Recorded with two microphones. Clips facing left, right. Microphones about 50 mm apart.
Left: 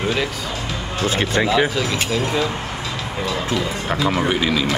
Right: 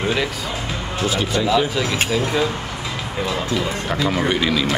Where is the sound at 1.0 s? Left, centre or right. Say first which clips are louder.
Left 2 dB; left.